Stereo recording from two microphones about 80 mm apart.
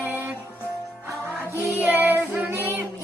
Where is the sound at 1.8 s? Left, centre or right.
Right.